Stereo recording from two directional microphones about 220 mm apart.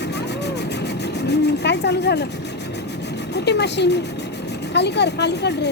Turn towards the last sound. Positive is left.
turn(degrees=50)  # may be behind; listen again after turning